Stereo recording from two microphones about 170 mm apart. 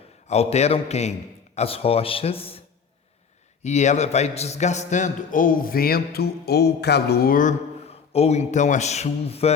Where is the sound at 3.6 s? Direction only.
40° left (ahead or behind).